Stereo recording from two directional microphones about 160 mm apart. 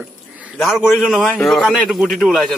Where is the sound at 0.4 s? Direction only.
Centre (ahead or behind).